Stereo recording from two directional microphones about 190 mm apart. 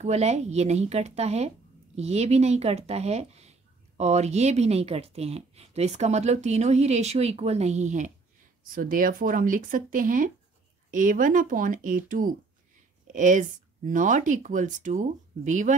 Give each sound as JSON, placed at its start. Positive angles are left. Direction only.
{"t": 0.0, "sound": "speech", "side_deg": -35}